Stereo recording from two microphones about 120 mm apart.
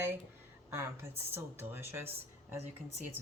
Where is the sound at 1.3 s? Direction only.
20° right (ahead or behind).